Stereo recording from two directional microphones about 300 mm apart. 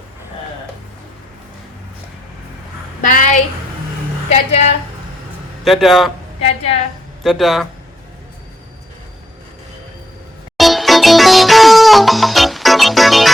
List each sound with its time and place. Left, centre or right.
3.0 s a sound: left
4.3 s a woman's voice: left
5.6 s speech: centre
6.4 s a sound: left
7.2 s speech: centre
10.6 s music: centre